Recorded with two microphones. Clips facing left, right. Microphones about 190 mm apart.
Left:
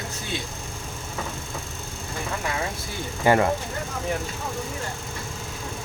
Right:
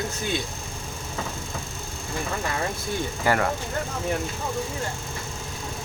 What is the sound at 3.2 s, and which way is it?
Speech, 20° left (ahead or behind).